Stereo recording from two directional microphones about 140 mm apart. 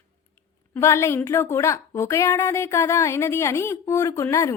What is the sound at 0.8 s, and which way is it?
A woman's voice, 20° left (ahead or behind).